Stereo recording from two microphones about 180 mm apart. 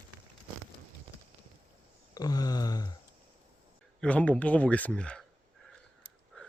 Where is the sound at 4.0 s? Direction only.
5° left (ahead or behind).